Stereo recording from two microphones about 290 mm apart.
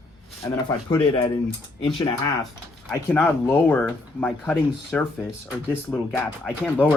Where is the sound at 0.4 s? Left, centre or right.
Centre.